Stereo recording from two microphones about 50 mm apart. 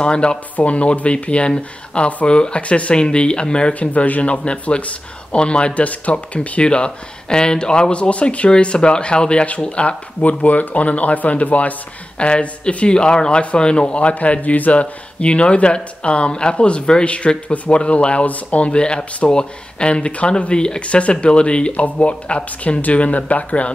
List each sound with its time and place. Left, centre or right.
0.0 s speech: centre